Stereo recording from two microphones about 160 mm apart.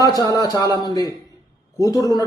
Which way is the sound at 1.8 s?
20° left (ahead or behind).